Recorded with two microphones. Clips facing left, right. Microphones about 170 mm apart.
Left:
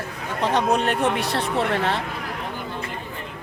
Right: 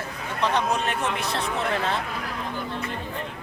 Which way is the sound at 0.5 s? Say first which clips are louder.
Left 8 dB; 60° left (ahead or behind).